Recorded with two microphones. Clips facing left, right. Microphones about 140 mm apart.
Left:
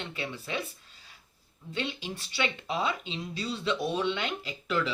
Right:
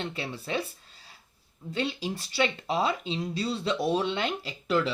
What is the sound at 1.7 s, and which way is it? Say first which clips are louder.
Speech: right 4 dB; 35° right (ahead or behind).